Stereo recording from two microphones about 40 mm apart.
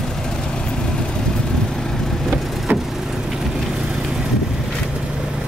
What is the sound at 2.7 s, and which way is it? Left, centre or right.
Vehicle, right.